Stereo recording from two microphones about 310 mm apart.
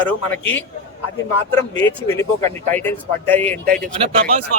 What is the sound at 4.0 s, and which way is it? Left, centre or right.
Speech, centre.